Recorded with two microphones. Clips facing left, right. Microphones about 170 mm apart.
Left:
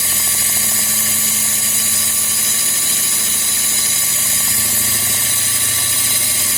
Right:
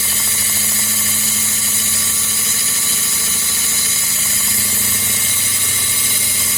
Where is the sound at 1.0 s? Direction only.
65° left (ahead or behind).